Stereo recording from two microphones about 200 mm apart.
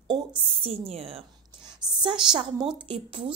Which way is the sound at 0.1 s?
25° right (ahead or behind).